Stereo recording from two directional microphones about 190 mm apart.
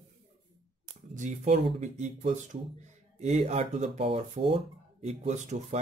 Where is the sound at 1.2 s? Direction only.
40° right (ahead or behind).